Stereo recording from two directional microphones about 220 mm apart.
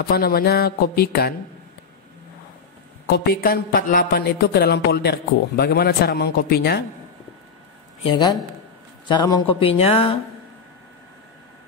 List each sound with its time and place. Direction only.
0.1 s speech: 45° left (ahead or behind)
3.1 s speech: 45° left (ahead or behind)
8.0 s speech: 20° left (ahead or behind)